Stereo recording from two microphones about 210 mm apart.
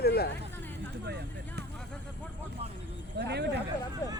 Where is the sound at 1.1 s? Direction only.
50° right (ahead or behind).